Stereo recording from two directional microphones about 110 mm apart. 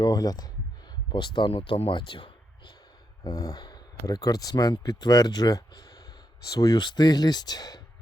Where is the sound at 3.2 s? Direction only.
35° left (ahead or behind).